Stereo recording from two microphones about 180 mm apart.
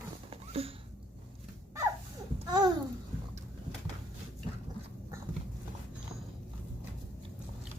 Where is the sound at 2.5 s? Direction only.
20° right (ahead or behind).